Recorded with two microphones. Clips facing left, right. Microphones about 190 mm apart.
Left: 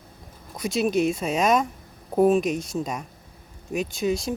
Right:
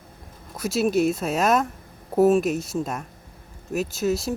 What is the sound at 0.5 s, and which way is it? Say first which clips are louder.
Speech: right 1 dB; 5° right (ahead or behind).